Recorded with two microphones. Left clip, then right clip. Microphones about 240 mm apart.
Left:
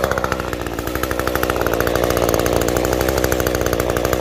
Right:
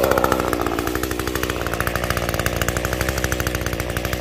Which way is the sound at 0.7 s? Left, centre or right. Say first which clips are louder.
Even; centre.